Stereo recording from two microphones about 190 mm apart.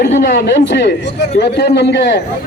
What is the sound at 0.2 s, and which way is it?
A man's voice, 60° left (ahead or behind).